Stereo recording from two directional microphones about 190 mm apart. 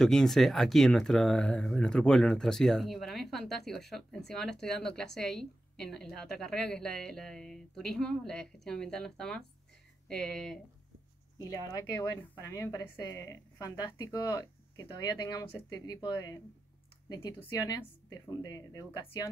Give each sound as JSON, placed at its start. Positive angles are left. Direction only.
{"t": 0.0, "sound": "speech", "side_deg": 0}
{"t": 11.4, "sound": "a woman's voice", "side_deg": 15}